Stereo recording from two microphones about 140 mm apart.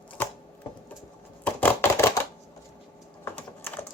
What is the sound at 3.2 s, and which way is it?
Typing, 15° left (ahead or behind).